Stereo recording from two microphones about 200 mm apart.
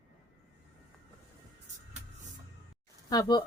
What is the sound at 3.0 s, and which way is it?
Speech, 20° left (ahead or behind).